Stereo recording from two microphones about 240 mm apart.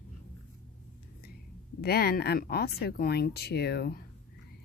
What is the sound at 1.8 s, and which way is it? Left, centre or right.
Speech, left.